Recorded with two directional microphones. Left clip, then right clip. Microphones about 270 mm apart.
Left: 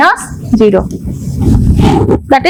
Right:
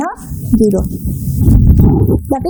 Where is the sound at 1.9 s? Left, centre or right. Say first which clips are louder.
Left 7 dB; left.